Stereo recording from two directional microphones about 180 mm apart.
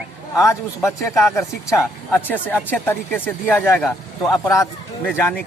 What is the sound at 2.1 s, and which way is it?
Speech, 10° left (ahead or behind).